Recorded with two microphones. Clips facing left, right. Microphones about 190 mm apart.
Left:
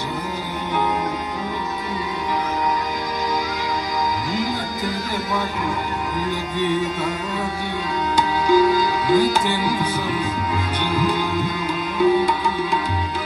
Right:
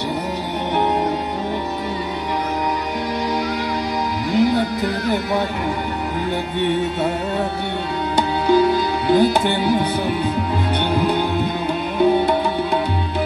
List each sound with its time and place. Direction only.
4.3 s music: 65° right (ahead or behind)
6.6 s music: 60° right (ahead or behind)